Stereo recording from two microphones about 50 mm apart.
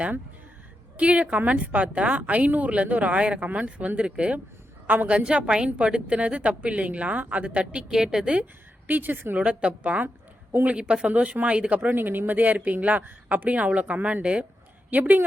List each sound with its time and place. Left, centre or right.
0.9 s speech: right
7.9 s a woman's voice: centre
8.9 s speech: right
9.4 s speech: right
10.8 s speech: centre
11.9 s speech: right
14.8 s speech: right